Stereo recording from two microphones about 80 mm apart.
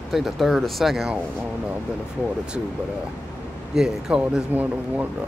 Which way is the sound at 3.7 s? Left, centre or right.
Centre.